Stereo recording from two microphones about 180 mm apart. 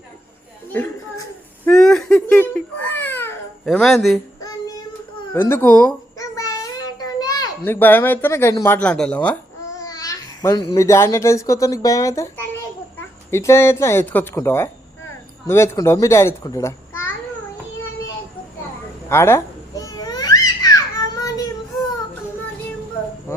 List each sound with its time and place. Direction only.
0.7 s a sound: 10° left (ahead or behind)
1.6 s babbling: 5° left (ahead or behind)
3.7 s speech: centre (ahead or behind)
4.4 s child singing: 20° left (ahead or behind)
5.3 s a child's voice: 10° left (ahead or behind)
6.1 s a sound: 20° left (ahead or behind)
9.7 s a child's voice: 20° left (ahead or behind)
19.0 s babbling: 15° left (ahead or behind)